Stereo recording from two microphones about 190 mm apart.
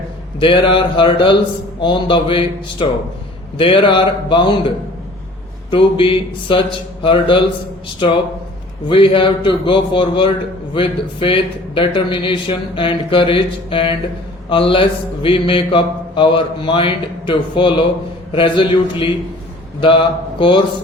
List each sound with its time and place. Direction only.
0.3 s mantra: 25° left (ahead or behind)
5.7 s mantra: 25° left (ahead or behind)
8.9 s mantra: 30° left (ahead or behind)